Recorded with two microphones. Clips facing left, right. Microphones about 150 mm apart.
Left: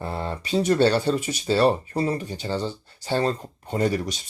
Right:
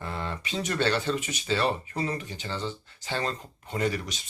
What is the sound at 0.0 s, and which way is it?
Speech, 35° left (ahead or behind).